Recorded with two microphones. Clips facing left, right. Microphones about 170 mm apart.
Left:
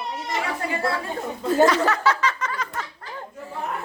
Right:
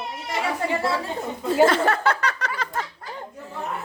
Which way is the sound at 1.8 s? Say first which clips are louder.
Even; 55° right (ahead or behind).